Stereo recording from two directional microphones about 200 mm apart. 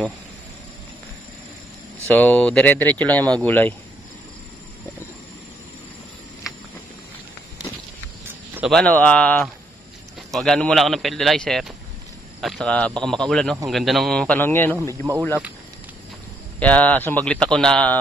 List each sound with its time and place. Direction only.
2.0 s speech: 10° left (ahead or behind)
8.5 s speech: 5° right (ahead or behind)
8.8 s speech: 5° left (ahead or behind)
16.5 s speech: 5° left (ahead or behind)